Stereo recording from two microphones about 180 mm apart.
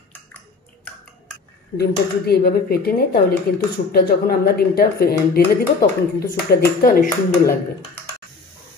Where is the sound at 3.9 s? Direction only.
60° left (ahead or behind).